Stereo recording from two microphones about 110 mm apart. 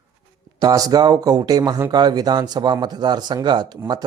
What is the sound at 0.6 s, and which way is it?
Speech, 35° right (ahead or behind).